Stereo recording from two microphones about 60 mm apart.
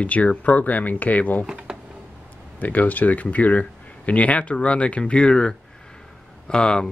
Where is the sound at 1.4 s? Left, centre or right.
Centre.